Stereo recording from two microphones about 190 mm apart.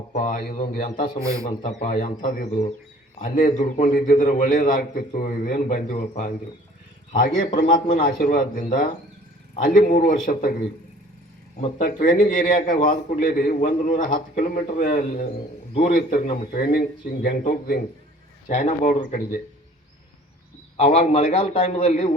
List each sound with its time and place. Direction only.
0.1 s a man's voice: 45° left (ahead or behind)
18.4 s a man's voice: 35° left (ahead or behind)
20.7 s a man's voice: 35° left (ahead or behind)